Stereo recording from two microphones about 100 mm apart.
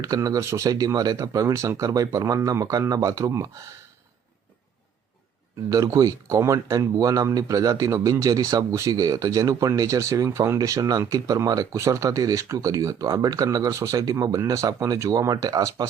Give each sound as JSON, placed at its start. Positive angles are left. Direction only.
{"t": 0.0, "sound": "speech", "side_deg": -35}
{"t": 5.6, "sound": "speech", "side_deg": -35}